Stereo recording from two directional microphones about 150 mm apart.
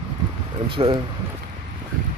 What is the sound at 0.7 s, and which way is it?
Speech, 35° right (ahead or behind).